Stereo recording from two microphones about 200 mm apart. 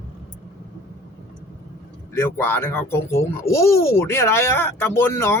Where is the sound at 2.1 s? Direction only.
10° left (ahead or behind).